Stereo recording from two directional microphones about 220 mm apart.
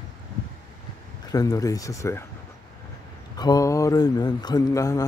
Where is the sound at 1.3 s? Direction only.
15° left (ahead or behind).